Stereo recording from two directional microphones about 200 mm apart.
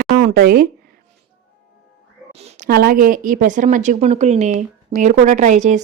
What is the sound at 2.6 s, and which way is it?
Speech, 50° right (ahead or behind).